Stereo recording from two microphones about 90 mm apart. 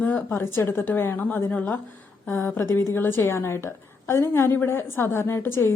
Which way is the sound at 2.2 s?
25° left (ahead or behind).